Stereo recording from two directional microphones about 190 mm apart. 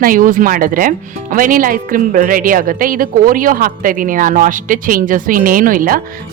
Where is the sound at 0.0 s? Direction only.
45° right (ahead or behind).